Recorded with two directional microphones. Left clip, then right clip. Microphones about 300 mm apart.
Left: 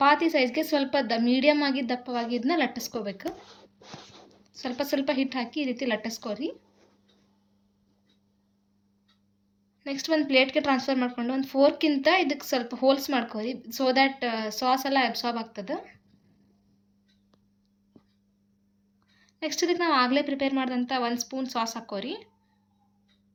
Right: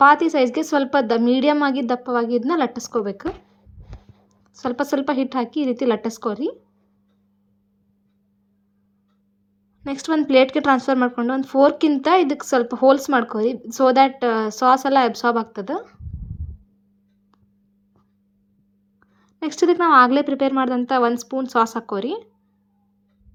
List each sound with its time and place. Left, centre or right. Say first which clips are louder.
0.0 s a woman's voice: right 8 dB; centre
4.6 s a woman's voice: right 6 dB; centre
10.1 s a woman's voice: right 7 dB; centre
19.5 s a woman's voice: right 9 dB; centre